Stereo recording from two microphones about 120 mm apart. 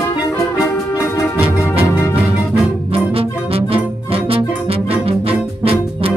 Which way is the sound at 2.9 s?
50° right (ahead or behind).